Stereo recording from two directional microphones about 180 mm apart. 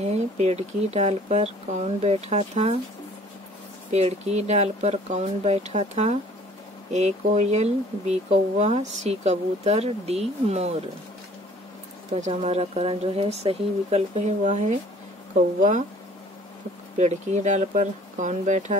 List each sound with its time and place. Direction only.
0.0 s speech: 35° right (ahead or behind)
3.9 s speech: 40° right (ahead or behind)
12.1 s speech: 40° right (ahead or behind)
17.0 s speech: 40° right (ahead or behind)